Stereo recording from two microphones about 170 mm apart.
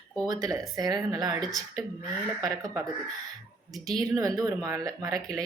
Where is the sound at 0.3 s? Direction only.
20° right (ahead or behind).